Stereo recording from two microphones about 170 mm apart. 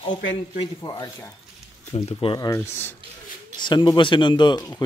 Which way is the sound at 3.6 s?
25° left (ahead or behind).